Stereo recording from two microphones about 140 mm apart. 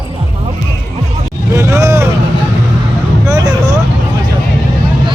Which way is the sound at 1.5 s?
20° right (ahead or behind).